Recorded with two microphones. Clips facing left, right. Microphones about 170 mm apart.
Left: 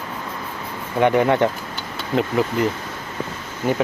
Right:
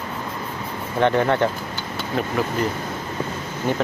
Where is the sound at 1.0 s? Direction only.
15° left (ahead or behind).